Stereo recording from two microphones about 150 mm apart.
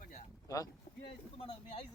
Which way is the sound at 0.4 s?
20° left (ahead or behind).